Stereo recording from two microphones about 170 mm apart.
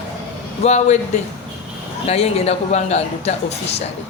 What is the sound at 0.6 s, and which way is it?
Speech, 40° left (ahead or behind).